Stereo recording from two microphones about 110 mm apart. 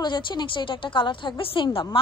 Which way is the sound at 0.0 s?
45° left (ahead or behind).